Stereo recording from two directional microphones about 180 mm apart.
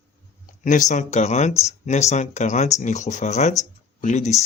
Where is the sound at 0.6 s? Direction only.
45° left (ahead or behind).